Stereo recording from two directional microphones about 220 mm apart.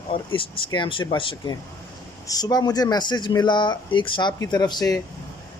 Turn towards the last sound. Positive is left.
turn(degrees=20)  # may be behind; listen again after turning